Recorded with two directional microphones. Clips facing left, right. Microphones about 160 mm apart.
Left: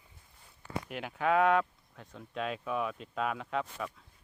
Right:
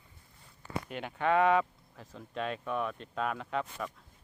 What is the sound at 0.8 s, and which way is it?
Speech, 5° left (ahead or behind).